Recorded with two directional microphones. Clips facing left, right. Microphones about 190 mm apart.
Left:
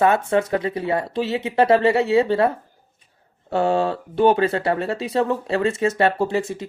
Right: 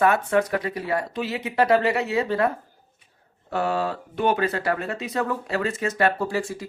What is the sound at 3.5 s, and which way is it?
Speech, 25° left (ahead or behind).